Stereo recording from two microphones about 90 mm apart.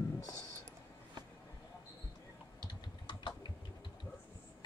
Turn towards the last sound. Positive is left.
turn(degrees=60)  # may be behind; listen again after turning